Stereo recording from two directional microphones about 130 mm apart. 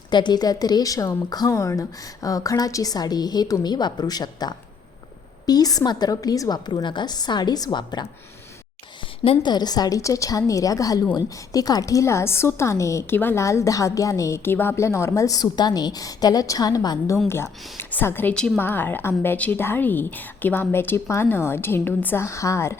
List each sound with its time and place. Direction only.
0.1 s a woman's voice: 35° left (ahead or behind)